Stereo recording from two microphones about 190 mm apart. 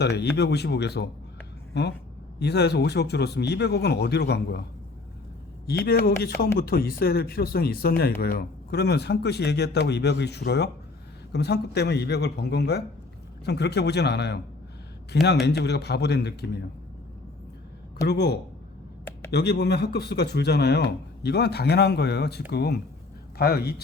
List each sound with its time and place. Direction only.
0.0 s a man's voice: 60° left (ahead or behind)
5.6 s a man's voice: 55° left (ahead or behind)
18.1 s a man's voice: 60° left (ahead or behind)